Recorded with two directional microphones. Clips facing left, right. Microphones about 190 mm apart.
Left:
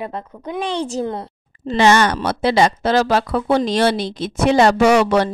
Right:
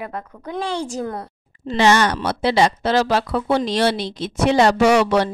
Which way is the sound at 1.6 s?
50° left (ahead or behind).